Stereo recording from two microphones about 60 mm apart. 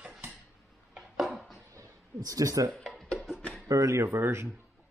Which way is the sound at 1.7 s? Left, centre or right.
Right.